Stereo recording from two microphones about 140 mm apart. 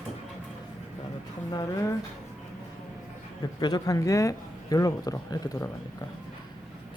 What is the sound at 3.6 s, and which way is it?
A man's voice, 25° left (ahead or behind).